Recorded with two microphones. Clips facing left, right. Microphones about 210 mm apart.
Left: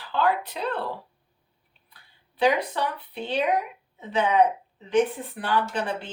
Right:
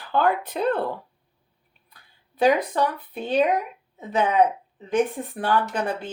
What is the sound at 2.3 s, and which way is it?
Speech, 45° right (ahead or behind).